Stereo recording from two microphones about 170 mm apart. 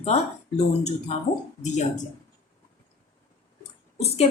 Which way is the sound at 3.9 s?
40° left (ahead or behind).